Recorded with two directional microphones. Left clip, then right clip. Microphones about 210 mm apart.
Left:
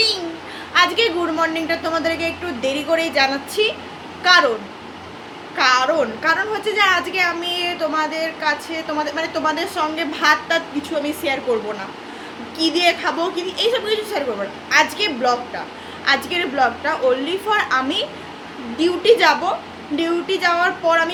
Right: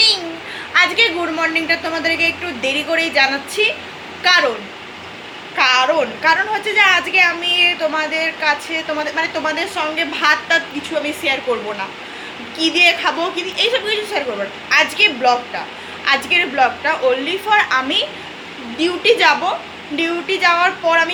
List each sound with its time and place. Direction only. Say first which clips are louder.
0.7 s a woman's voice: right 2 dB; 20° left (ahead or behind)
5.5 s a woman's voice: right 2 dB; 20° left (ahead or behind)
12.5 s a woman's voice: right 4 dB; 20° left (ahead or behind)